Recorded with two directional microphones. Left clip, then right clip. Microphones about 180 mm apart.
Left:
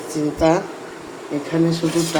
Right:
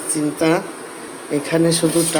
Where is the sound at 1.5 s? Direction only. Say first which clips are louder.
Right 3 dB; 25° right (ahead or behind).